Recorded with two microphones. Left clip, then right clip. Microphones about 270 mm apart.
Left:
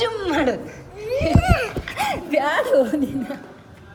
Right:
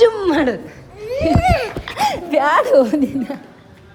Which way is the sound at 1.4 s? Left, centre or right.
Right.